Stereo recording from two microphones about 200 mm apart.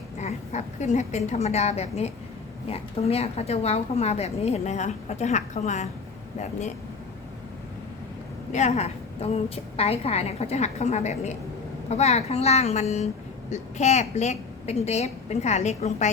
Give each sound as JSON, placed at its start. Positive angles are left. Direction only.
{"t": 0.2, "sound": "a woman's voice", "side_deg": 35}
{"t": 8.5, "sound": "a woman's voice", "side_deg": 35}